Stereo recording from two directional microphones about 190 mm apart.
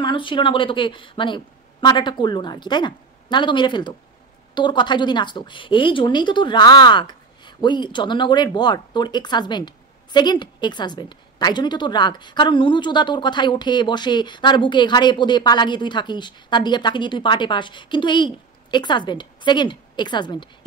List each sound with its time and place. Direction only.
0.0 s a woman's voice: 25° left (ahead or behind)